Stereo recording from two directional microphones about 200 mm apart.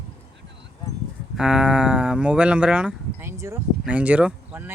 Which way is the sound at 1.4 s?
5° right (ahead or behind).